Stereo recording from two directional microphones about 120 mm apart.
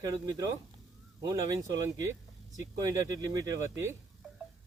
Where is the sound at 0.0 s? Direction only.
25° right (ahead or behind).